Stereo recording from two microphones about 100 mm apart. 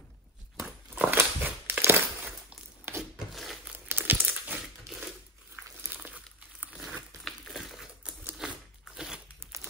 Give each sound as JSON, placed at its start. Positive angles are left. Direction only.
{"t": 0.6, "sound": "crumpling", "side_deg": -20}
{"t": 2.9, "sound": "a sound", "side_deg": -25}
{"t": 3.3, "sound": "crumpling", "side_deg": 0}
{"t": 3.7, "sound": "crumpling", "side_deg": -20}
{"t": 5.9, "sound": "crumpling", "side_deg": -15}
{"t": 7.2, "sound": "a sound", "side_deg": 0}
{"t": 8.4, "sound": "biting", "side_deg": -10}
{"t": 8.9, "sound": "crumpling", "side_deg": -5}
{"t": 9.4, "sound": "crumpling", "side_deg": -25}